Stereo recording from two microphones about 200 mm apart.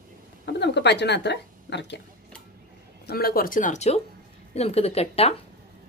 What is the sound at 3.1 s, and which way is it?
A woman's voice, 50° left (ahead or behind).